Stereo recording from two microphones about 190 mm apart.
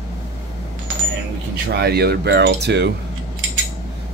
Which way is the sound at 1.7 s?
55° right (ahead or behind).